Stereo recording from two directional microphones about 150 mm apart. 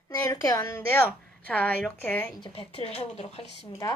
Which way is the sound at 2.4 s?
40° left (ahead or behind).